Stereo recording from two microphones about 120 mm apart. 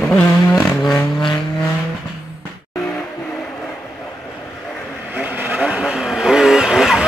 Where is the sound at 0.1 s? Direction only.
10° left (ahead or behind).